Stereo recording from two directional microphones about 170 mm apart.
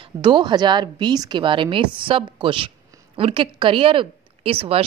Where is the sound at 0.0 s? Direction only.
30° right (ahead or behind).